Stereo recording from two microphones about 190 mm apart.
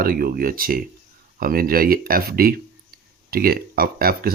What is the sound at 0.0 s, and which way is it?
Speech, 50° right (ahead or behind).